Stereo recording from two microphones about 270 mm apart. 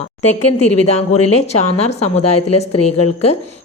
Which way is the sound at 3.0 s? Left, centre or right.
Left.